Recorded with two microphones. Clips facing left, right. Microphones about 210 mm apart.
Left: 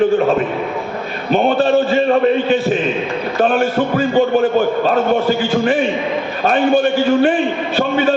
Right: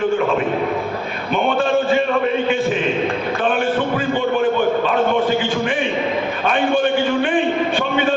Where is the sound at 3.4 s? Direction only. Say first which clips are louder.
Left 5 dB; 40° left (ahead or behind).